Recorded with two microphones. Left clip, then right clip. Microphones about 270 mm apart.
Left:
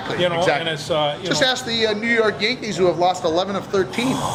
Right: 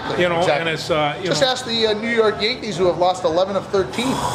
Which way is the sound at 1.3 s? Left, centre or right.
Left.